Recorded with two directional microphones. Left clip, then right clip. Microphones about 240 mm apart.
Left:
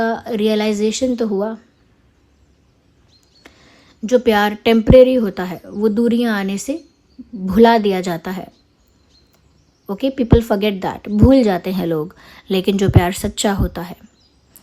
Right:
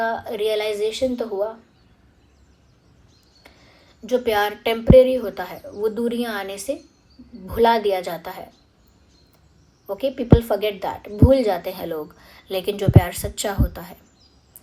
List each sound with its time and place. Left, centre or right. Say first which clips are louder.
0.0 s a woman's voice: left 4 dB; left
3.4 s a woman's voice: left 4 dB; left
9.9 s a woman's voice: left 3 dB; left